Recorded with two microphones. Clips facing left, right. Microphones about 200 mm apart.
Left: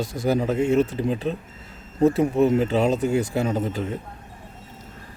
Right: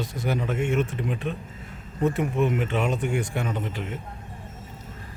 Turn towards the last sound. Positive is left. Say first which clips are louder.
# left 6 dB
turn(degrees=40)  # may be behind; listen again after turning